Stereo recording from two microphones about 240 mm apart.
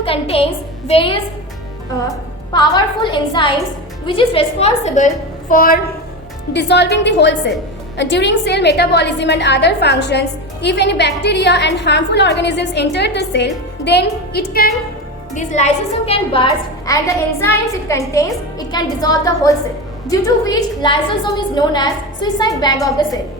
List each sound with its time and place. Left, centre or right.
0.0 s a woman's voice: left